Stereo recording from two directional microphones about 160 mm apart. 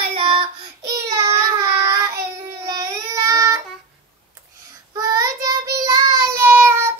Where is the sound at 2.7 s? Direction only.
20° right (ahead or behind).